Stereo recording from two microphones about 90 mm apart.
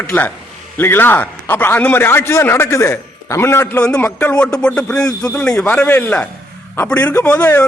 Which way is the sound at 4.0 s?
15° left (ahead or behind).